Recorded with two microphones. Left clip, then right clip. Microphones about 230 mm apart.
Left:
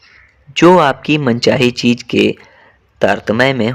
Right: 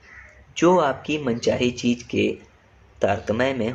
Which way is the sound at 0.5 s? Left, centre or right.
Left.